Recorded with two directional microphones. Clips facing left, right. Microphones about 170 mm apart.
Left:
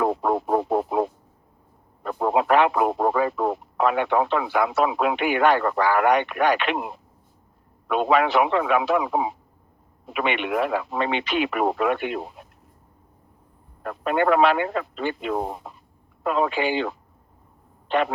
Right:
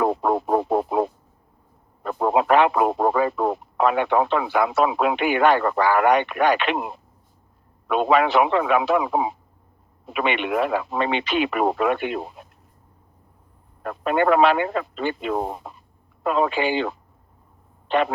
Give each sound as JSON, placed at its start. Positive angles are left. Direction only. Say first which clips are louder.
{"t": 0.0, "sound": "radio", "louder": "right 1 dB", "side_deg": -30}
{"t": 2.0, "sound": "speech", "louder": "right 2 dB", "side_deg": -25}
{"t": 7.9, "sound": "speech", "louder": "right 1 dB", "side_deg": -25}
{"t": 13.8, "sound": "speech", "louder": "right 1 dB", "side_deg": -25}